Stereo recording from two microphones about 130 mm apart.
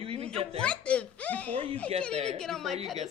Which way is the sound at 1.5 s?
45° right (ahead or behind).